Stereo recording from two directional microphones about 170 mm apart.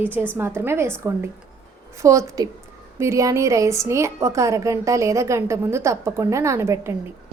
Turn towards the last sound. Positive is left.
turn(degrees=-15)  # may be behind; listen again after turning